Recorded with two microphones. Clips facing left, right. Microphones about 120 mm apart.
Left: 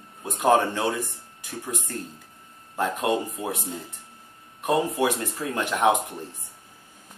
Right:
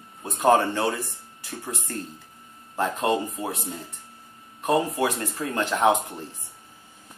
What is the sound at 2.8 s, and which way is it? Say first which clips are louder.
Speech: right 1 dB; 10° left (ahead or behind).